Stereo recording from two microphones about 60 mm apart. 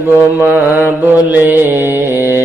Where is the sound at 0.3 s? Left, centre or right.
Right.